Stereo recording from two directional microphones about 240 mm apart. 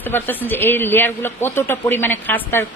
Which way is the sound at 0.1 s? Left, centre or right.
Centre.